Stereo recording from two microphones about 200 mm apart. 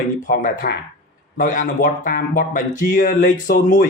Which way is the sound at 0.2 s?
40° left (ahead or behind).